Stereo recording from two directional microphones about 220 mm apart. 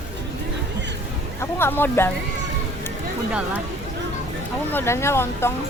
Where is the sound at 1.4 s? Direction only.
10° left (ahead or behind).